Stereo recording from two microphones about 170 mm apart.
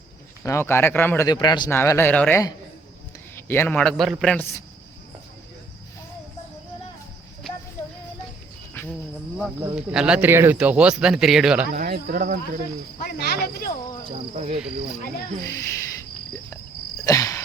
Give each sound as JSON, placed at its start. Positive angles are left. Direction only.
{"t": 0.4, "sound": "speech", "side_deg": 15}
{"t": 1.7, "sound": "speech", "side_deg": 15}
{"t": 9.4, "sound": "speech", "side_deg": -5}
{"t": 11.7, "sound": "speech", "side_deg": -60}
{"t": 13.0, "sound": "speech", "side_deg": 65}
{"t": 14.3, "sound": "cricket", "side_deg": -40}
{"t": 15.5, "sound": "cricket", "side_deg": 20}
{"t": 17.1, "sound": "cricket", "side_deg": 20}